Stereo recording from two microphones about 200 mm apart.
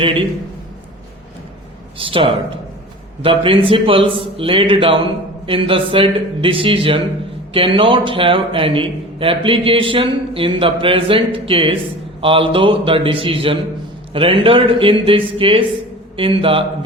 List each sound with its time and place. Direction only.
2.0 s a man's voice: 25° right (ahead or behind)